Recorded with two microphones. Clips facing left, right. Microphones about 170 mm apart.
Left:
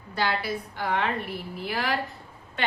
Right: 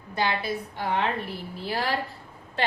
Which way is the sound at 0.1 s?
20° right (ahead or behind).